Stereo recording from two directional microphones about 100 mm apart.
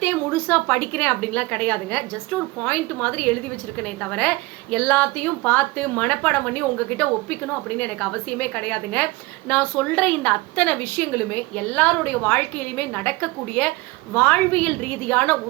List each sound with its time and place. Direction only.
0.0 s a woman's voice: 20° left (ahead or behind)